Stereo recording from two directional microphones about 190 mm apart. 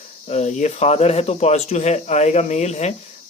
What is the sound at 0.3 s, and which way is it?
Speech, 35° left (ahead or behind).